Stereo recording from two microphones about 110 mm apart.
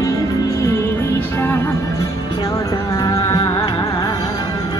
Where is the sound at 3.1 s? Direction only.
35° left (ahead or behind).